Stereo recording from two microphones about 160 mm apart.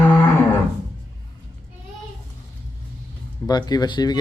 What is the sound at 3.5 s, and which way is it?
Speech, 25° left (ahead or behind).